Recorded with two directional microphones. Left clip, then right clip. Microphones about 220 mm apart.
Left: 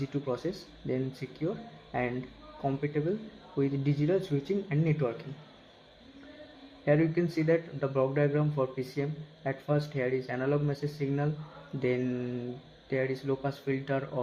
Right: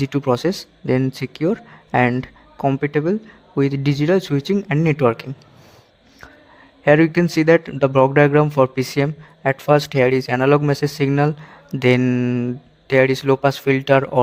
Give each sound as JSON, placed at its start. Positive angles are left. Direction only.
{"t": 0.0, "sound": "a man's voice", "side_deg": -55}
{"t": 6.8, "sound": "a man's voice", "side_deg": -55}